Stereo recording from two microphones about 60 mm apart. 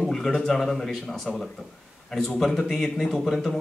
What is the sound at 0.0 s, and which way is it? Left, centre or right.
A man's voice, centre.